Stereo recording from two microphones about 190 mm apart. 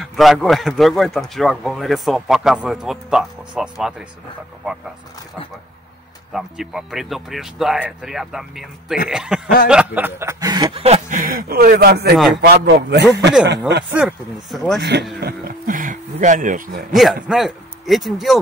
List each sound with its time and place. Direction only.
0.1 s a man's voice: centre (ahead or behind)
6.3 s a man's voice: centre (ahead or behind); by 13.9 s 65° right (ahead or behind)
13.9 s a man's voice: centre (ahead or behind)
14.8 s speech: 60° right (ahead or behind); by 16.8 s 45° right (ahead or behind)
16.9 s a man's voice: centre (ahead or behind)